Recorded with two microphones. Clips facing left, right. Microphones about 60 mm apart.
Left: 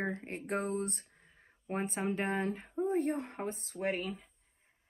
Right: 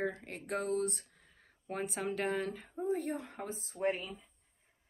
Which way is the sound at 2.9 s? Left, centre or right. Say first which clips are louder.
Left 2 dB; left.